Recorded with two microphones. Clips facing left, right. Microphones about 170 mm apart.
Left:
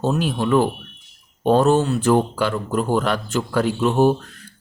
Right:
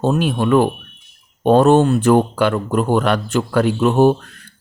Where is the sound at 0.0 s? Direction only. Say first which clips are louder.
Right 4 dB; 60° right (ahead or behind).